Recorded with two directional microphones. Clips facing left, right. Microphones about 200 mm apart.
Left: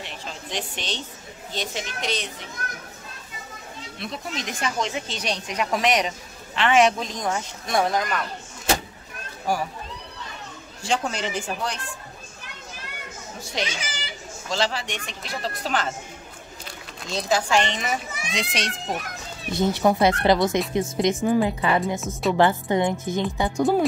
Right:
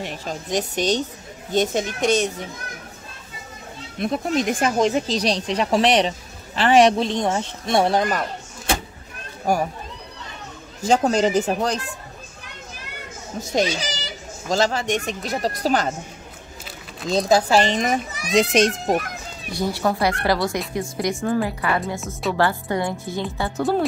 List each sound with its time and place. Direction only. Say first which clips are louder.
0.0 s speech: right 7 dB; 45° right (ahead or behind)
4.0 s speech: right 11 dB; 50° right (ahead or behind); by 8.2 s 30° right (ahead or behind)
10.8 s speech: right 8 dB; 40° right (ahead or behind)
13.4 s speech: right 9 dB; 40° right (ahead or behind)
17.3 s speech: right 4 dB; 35° right (ahead or behind)
19.5 s a woman's voice: left 2 dB; 20° left (ahead or behind)